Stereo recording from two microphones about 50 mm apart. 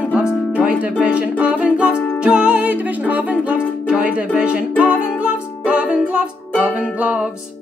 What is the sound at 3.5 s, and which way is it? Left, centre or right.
Music, right.